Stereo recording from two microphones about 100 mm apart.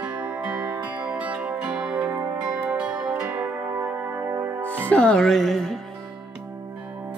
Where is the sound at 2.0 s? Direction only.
25° right (ahead or behind).